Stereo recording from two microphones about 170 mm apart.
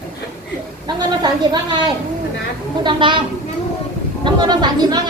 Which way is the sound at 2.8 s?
30° right (ahead or behind).